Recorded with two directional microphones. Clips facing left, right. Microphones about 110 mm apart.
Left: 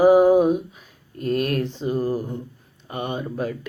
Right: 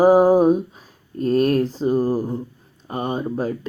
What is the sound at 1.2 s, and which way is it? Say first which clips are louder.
Speech: right 5 dB; 35° right (ahead or behind).